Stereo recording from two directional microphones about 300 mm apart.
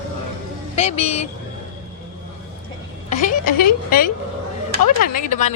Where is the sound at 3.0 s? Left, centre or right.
Left.